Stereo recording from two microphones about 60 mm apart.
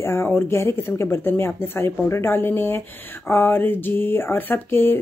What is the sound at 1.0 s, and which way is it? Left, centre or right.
Speech, left.